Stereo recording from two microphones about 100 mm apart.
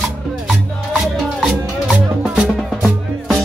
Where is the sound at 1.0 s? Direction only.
Centre (ahead or behind).